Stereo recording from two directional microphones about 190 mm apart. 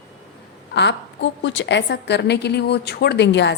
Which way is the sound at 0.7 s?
65° left (ahead or behind).